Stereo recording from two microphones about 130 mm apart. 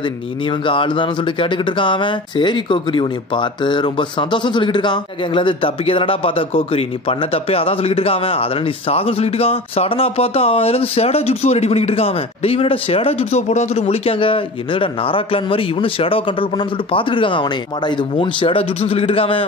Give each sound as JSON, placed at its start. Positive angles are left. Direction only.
{"t": 0.5, "sound": "speech", "side_deg": 40}